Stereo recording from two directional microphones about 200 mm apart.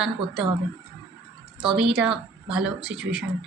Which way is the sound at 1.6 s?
5° right (ahead or behind).